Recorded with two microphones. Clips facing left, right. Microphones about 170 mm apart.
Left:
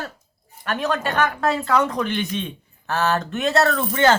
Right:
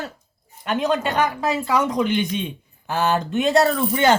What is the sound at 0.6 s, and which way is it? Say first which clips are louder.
Speech: right 2 dB; 20° right (ahead or behind).